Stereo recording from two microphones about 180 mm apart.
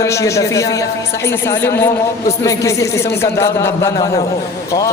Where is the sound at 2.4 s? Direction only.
15° left (ahead or behind).